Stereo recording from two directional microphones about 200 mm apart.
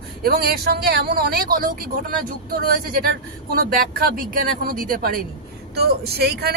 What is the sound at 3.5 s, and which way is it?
Speech, 50° right (ahead or behind).